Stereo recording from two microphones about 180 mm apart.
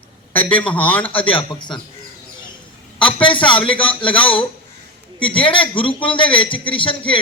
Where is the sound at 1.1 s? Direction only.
30° left (ahead or behind).